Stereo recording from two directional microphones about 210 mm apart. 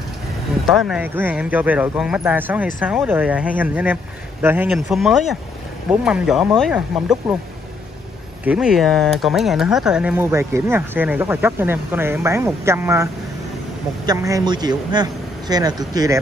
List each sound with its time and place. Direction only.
0.8 s speech: 5° right (ahead or behind)
8.5 s a man's voice: 5° right (ahead or behind)